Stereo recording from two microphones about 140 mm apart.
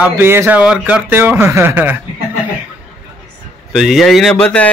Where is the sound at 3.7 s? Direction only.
Centre (ahead or behind).